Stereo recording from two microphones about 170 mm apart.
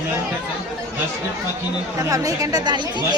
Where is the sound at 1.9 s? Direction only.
20° right (ahead or behind).